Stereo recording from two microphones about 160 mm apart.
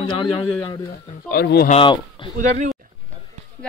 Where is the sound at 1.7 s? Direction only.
35° left (ahead or behind).